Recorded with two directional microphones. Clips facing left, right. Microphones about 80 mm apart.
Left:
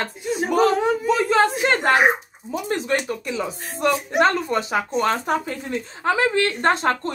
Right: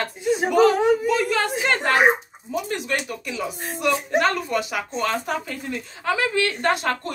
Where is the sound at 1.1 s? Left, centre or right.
Left.